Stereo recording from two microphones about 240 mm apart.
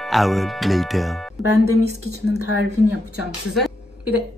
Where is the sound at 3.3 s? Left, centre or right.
Centre.